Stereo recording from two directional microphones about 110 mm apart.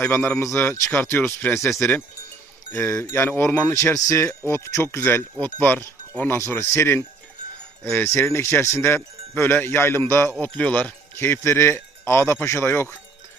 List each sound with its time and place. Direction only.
0.0 s speech: 15° left (ahead or behind)